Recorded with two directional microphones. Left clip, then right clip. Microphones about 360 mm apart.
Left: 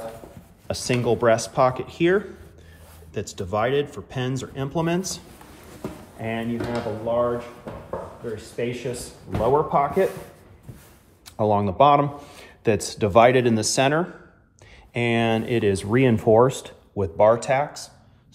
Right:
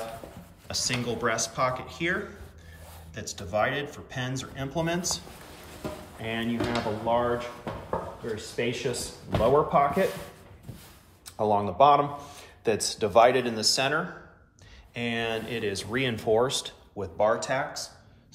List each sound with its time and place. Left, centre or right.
0.7 s speech: centre
3.2 s speech: centre
6.7 s speech: centre
11.3 s speech: centre
15.0 s speech: centre